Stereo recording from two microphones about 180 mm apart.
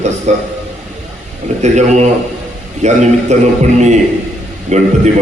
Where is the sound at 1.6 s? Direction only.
40° right (ahead or behind).